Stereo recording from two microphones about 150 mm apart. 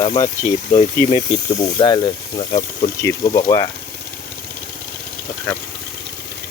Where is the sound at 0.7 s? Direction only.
40° left (ahead or behind).